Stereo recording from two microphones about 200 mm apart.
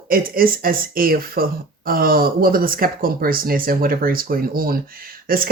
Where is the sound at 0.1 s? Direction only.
45° right (ahead or behind).